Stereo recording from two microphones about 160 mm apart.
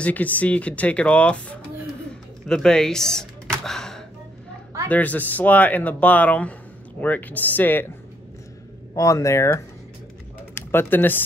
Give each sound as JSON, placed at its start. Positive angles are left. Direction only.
{"t": 0.0, "sound": "speech", "side_deg": 10}
{"t": 8.9, "sound": "speech", "side_deg": 20}